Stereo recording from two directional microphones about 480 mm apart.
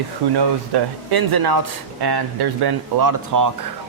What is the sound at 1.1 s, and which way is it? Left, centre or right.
Speech, right.